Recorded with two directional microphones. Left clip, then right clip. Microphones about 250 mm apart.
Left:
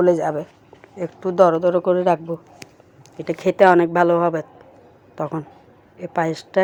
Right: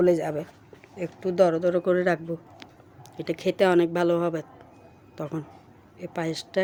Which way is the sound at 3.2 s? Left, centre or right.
Centre.